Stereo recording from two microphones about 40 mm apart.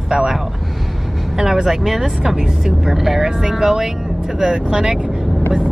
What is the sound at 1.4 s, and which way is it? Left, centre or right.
Speech, centre.